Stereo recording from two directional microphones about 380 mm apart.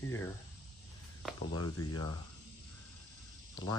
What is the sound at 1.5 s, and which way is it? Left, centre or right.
Speech, left.